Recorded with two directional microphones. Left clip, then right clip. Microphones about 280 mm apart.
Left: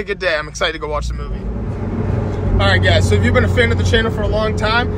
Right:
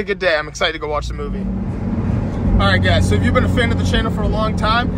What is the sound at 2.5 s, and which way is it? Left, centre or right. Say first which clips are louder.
Speech: left 2 dB; centre.